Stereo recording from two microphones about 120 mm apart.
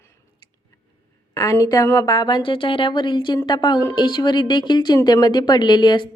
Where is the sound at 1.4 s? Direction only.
30° left (ahead or behind).